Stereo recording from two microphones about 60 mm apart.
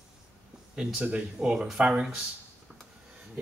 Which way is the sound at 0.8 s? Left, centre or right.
Right.